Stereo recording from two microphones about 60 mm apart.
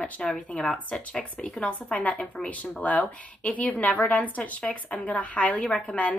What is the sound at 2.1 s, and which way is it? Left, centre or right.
Speech, centre.